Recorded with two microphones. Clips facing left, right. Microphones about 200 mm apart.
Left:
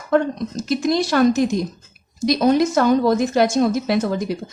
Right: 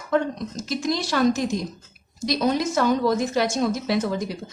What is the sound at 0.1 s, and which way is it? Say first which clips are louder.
A woman's voice: left 5 dB; 60° left (ahead or behind).